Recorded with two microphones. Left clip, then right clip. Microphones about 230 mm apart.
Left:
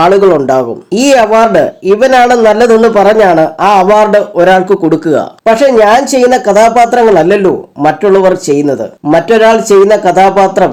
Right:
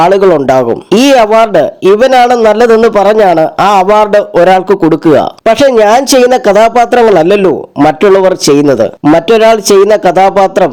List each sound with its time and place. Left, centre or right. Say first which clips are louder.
0.0 s a man's voice: even; right